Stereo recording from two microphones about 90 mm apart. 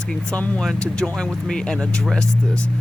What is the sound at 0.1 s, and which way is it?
Speech, 10° left (ahead or behind).